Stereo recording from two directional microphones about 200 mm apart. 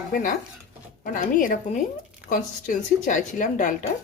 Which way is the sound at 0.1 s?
40° left (ahead or behind).